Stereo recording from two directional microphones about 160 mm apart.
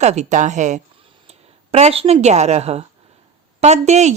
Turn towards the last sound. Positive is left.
turn(degrees=-45)  # may be behind; listen again after turning